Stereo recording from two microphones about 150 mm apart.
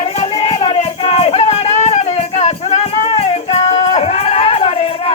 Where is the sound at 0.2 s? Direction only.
45° left (ahead or behind).